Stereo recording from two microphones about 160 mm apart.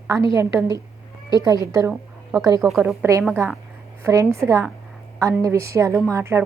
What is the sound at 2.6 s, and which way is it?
Speech, centre (ahead or behind).